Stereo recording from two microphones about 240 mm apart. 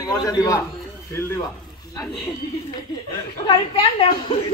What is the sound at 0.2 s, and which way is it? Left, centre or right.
Speech, centre.